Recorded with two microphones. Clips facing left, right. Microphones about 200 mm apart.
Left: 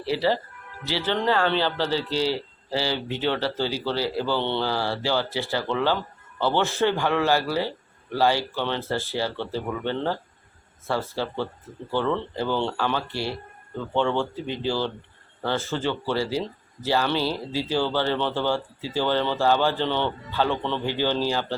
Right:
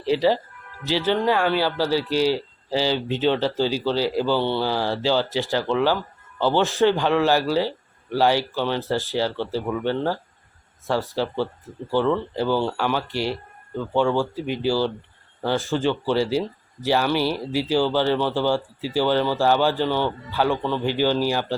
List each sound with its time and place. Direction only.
0.0 s speech: 15° right (ahead or behind)